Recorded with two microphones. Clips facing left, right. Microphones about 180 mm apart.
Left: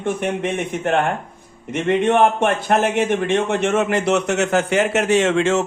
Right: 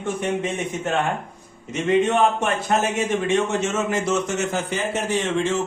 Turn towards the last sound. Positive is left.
turn(degrees=75)  # may be behind; listen again after turning